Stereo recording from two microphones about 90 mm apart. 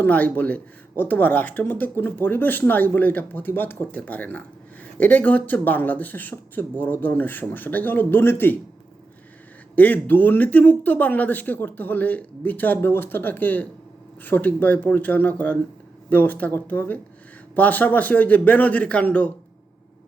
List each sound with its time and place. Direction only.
0.0 s speech: 20° left (ahead or behind)
9.7 s a man's voice: 20° left (ahead or behind)